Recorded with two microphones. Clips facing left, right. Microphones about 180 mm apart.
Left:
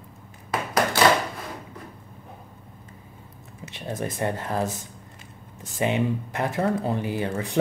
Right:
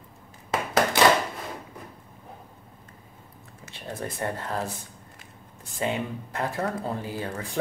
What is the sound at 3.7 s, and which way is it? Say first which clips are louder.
Speech: left 4 dB; 20° left (ahead or behind).